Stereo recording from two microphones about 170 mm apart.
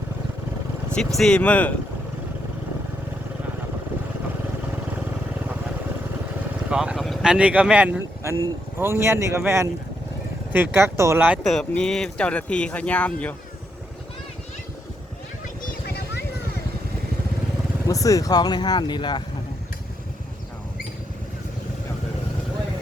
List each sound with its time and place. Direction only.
0.9 s speech: 5° left (ahead or behind)
6.7 s speech: 5° right (ahead or behind)
11.4 s speech: 5° left (ahead or behind)
15.6 s vehicle: 70° left (ahead or behind)
17.8 s speech: 20° left (ahead or behind)